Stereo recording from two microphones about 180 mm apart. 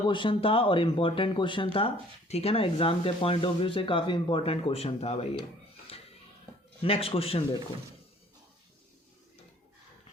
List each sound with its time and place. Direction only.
0.1 s speech: 30° left (ahead or behind)
6.8 s speech: 30° left (ahead or behind)